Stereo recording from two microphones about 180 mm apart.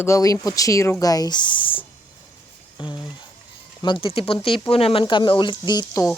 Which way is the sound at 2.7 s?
25° left (ahead or behind).